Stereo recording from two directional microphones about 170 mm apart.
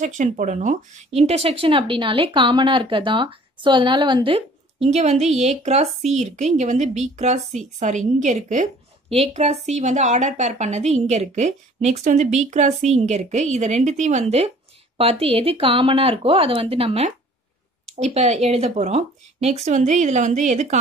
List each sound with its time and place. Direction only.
0.0 s a woman's voice: 45° right (ahead or behind)